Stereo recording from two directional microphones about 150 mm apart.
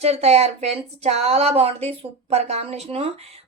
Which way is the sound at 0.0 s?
45° right (ahead or behind).